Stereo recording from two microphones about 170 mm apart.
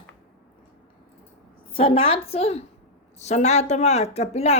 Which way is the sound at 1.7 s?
30° left (ahead or behind).